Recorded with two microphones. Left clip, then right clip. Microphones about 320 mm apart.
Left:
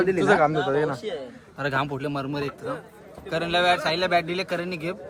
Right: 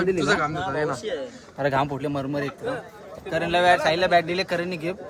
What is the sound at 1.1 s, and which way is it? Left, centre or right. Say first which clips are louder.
Speech: right 2 dB; left.